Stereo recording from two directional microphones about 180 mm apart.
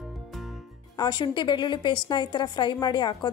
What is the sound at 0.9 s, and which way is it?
A woman's voice, 25° left (ahead or behind).